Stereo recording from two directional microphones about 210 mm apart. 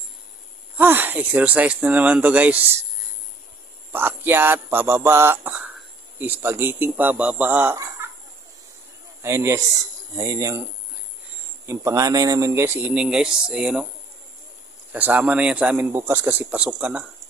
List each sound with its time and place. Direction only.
0.7 s speech: 10° right (ahead or behind)
3.9 s speech: 10° right (ahead or behind)
9.2 s speech: 10° right (ahead or behind)
11.6 s speech: 15° right (ahead or behind)
14.9 s speech: 10° right (ahead or behind)